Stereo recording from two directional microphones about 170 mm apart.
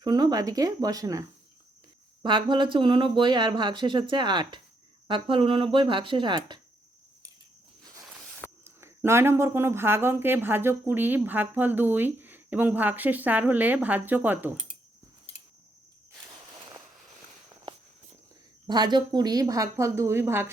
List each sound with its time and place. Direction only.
0.0 s speech: 25° right (ahead or behind)
2.2 s speech: 30° right (ahead or behind)
8.6 s speech: 15° right (ahead or behind)
18.7 s speech: 25° right (ahead or behind)